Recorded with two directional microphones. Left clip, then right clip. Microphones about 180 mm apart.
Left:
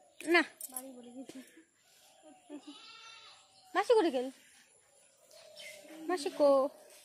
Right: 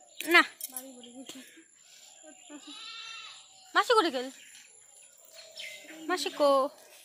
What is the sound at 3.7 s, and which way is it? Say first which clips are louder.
Speech: right 3 dB; 15° left (ahead or behind).